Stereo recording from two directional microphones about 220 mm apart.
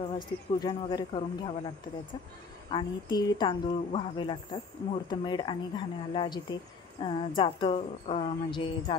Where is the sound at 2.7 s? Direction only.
20° left (ahead or behind).